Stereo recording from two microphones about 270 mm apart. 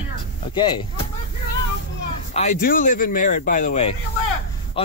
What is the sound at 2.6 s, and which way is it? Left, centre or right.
Speech, left.